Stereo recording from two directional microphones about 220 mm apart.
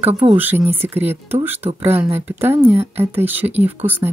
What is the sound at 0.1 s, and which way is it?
Speech, 25° right (ahead or behind).